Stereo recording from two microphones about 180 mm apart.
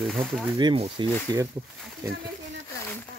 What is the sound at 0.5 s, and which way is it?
Speech, 25° right (ahead or behind).